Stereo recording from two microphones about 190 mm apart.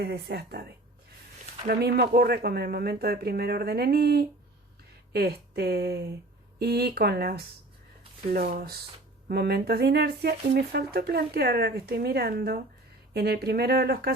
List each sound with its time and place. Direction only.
0.0 s speech: 60° right (ahead or behind)